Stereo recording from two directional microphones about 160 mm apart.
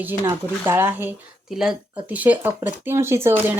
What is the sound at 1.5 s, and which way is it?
Speech, 5° right (ahead or behind).